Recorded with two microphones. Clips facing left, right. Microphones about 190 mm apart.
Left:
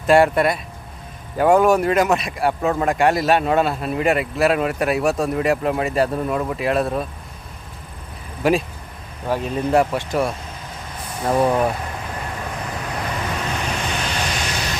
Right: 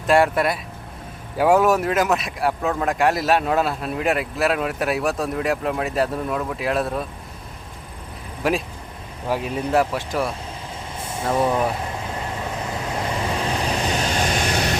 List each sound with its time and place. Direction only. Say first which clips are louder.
0.1 s a man's voice: left 3 dB; centre (ahead or behind)
8.4 s a man's voice: left 4 dB; centre (ahead or behind)
11.3 s speech: left 3 dB; 20° left (ahead or behind)
12.0 s vehicle: right 1 dB; 20° right (ahead or behind); by 14.8 s 50° right (ahead or behind)